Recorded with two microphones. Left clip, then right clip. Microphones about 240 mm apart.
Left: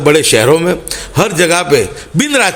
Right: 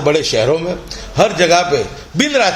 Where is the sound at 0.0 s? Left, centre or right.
Left.